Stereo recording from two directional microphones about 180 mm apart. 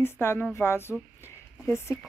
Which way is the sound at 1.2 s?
15° left (ahead or behind).